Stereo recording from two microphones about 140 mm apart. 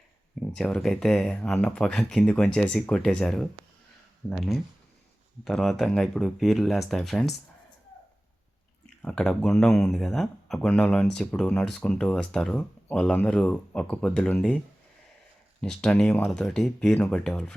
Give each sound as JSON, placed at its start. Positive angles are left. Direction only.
{"t": 0.3, "sound": "speech", "side_deg": 5}
{"t": 9.0, "sound": "speech", "side_deg": 5}
{"t": 15.6, "sound": "speech", "side_deg": 5}